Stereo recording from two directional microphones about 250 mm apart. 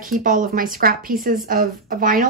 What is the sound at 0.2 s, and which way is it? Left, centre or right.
A woman's voice, right.